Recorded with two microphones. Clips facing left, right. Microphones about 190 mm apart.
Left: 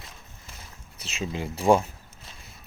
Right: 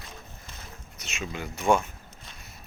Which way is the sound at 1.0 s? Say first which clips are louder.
Left 4 dB; 30° left (ahead or behind).